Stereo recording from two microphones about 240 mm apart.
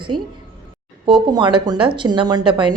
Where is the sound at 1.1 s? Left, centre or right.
Centre.